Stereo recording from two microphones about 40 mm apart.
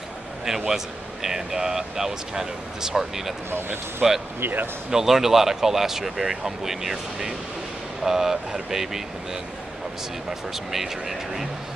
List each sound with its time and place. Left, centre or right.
0.5 s speech: centre
3.4 s speech: right
4.0 s speech: centre
4.4 s speech: right
4.9 s speech: centre
10.5 s speech: centre